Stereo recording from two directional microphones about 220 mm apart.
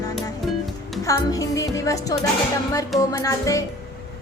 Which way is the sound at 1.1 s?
15° left (ahead or behind).